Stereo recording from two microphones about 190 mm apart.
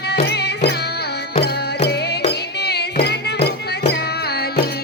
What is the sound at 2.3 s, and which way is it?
Music, 60° left (ahead or behind).